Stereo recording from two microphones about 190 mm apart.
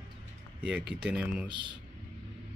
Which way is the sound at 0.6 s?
5° right (ahead or behind).